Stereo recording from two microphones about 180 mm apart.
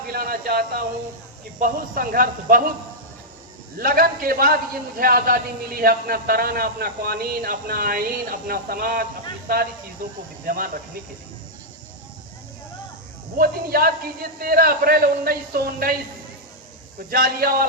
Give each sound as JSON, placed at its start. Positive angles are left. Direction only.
{"t": 0.1, "sound": "speech", "side_deg": -55}
{"t": 3.8, "sound": "a man's voice", "side_deg": -55}
{"t": 10.4, "sound": "a man's voice", "side_deg": -55}
{"t": 13.3, "sound": "a man's voice", "side_deg": -55}
{"t": 17.1, "sound": "a man's voice", "side_deg": -55}